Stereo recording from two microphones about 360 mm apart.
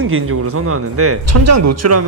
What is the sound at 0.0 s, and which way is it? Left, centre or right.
Speech, right.